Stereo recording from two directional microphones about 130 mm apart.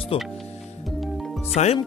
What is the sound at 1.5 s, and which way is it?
Speech, 55° left (ahead or behind).